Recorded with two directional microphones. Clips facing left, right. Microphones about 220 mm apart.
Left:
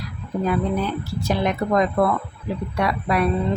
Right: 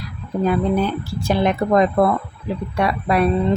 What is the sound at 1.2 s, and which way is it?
A woman's voice, 30° right (ahead or behind).